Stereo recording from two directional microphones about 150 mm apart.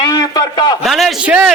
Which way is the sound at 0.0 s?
25° left (ahead or behind).